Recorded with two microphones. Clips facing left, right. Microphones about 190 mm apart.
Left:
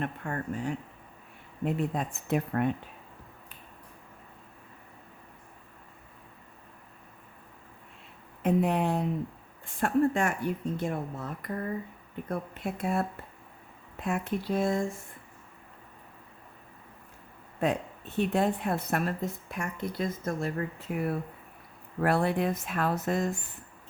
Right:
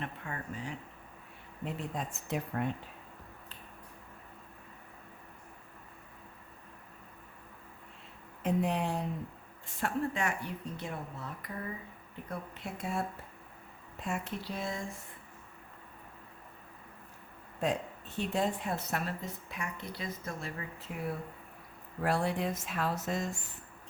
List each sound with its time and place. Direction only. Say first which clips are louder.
0.0 s a woman's voice: left 7 dB; 50° left (ahead or behind)
8.4 s a woman's voice: left 5 dB; 60° left (ahead or behind)
18.2 s a woman's voice: left 5 dB; 60° left (ahead or behind)